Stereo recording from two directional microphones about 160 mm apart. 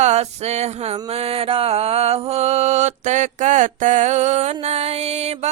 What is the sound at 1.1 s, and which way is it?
Mantra, 40° right (ahead or behind).